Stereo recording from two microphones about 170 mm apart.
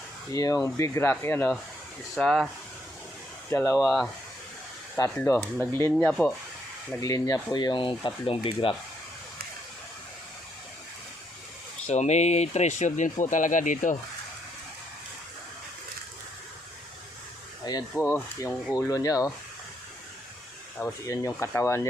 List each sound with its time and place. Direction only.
0.3 s speech: 20° left (ahead or behind); by 2.5 s 5° left (ahead or behind)
3.5 s speech: 15° left (ahead or behind)
3.8 s speech: centre (ahead or behind)
5.5 s speech: 15° left (ahead or behind)
7.0 s speech: 20° left (ahead or behind)
11.9 s speech: 40° left (ahead or behind)
17.7 s speech: 20° left (ahead or behind)
20.7 s speech: 15° left (ahead or behind)